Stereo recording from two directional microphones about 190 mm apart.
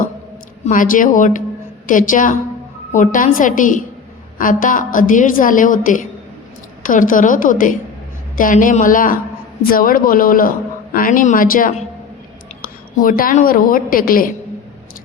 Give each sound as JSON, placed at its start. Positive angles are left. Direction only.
{"t": 0.6, "sound": "a woman's voice", "side_deg": 45}